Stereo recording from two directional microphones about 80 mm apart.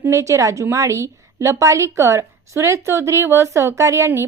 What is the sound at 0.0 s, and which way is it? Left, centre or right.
A woman's voice, right.